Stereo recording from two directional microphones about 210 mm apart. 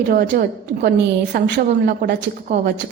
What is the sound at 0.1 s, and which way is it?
A woman's voice, 45° right (ahead or behind).